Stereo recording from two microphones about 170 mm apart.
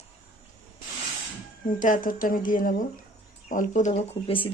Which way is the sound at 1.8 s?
50° left (ahead or behind).